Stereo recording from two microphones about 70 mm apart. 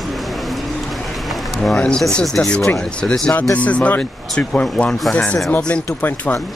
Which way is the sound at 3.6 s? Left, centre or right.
Centre.